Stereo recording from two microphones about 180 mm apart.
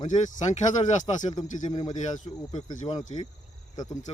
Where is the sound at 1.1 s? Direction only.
35° left (ahead or behind).